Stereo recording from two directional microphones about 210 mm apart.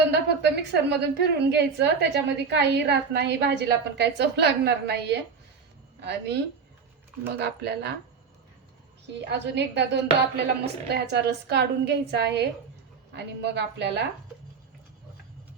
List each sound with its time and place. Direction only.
0.1 s a woman's voice: 55° right (ahead or behind)
9.2 s a woman's voice: 55° right (ahead or behind)